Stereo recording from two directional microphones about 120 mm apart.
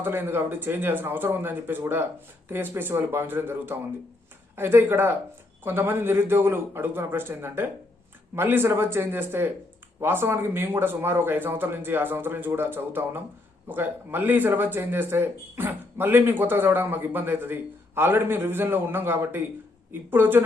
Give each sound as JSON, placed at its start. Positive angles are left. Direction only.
{"t": 0.0, "sound": "a man's voice", "side_deg": -20}